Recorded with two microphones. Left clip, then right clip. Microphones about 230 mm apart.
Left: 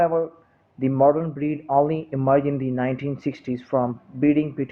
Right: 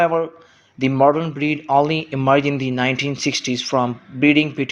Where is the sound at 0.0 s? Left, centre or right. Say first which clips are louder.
Right 3 dB; right.